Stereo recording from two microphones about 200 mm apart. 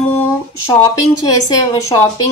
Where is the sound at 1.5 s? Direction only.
15° left (ahead or behind).